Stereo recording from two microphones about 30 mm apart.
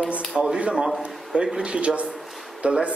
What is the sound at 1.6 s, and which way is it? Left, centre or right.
A man's voice, right.